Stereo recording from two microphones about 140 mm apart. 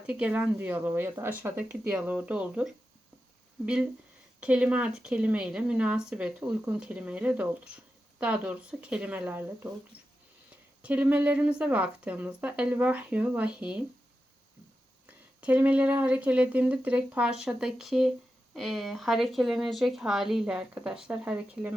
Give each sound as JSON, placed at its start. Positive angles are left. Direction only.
{"t": 0.0, "sound": "speech", "side_deg": -10}
{"t": 4.4, "sound": "speech", "side_deg": -10}
{"t": 9.9, "sound": "a sound", "side_deg": 15}
{"t": 10.8, "sound": "speech", "side_deg": -10}
{"t": 15.0, "sound": "speech", "side_deg": -10}